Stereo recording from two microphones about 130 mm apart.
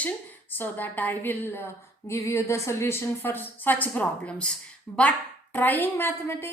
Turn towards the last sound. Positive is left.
turn(degrees=15)  # may be behind; listen again after turning